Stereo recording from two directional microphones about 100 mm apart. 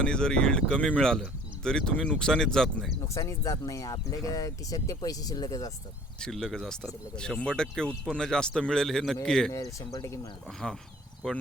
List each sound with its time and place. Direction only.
0.0 s speech: 10° left (ahead or behind)
3.1 s speech: 30° left (ahead or behind)
6.1 s speech: 5° left (ahead or behind)
9.5 s speech: 30° left (ahead or behind)
10.6 s speech: 5° left (ahead or behind)